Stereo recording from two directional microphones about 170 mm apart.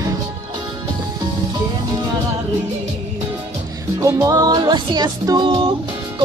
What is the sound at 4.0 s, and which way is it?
Music, 20° right (ahead or behind).